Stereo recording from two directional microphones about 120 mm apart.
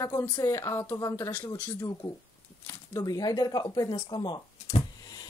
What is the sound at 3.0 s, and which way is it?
Speech, 30° left (ahead or behind).